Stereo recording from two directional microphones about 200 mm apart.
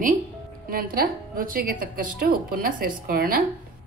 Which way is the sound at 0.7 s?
45° right (ahead or behind).